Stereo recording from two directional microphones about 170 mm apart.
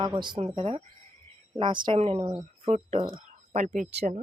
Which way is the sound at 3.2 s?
45° right (ahead or behind).